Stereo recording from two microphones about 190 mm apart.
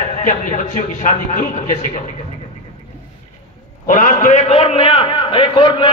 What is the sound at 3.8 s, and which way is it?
A man's voice, 45° left (ahead or behind).